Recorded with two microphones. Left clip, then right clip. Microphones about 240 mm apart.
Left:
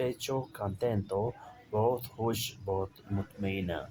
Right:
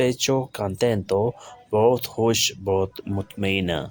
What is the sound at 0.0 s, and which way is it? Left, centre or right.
Speech, right.